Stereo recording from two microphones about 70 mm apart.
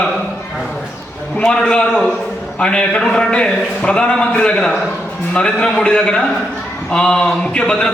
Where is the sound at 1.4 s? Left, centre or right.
Centre.